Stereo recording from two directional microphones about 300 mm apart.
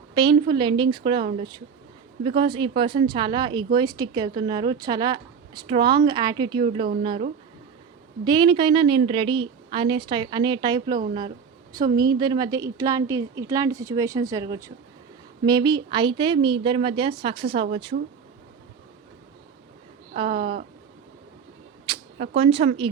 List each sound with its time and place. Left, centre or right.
0.1 s speech: centre
6.8 s speech: right
8.2 s speech: centre
20.1 s speech: centre
21.9 s a sound: centre
22.4 s speech: centre